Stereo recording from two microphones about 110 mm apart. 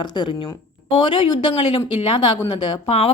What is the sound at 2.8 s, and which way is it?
Speech, 65° left (ahead or behind).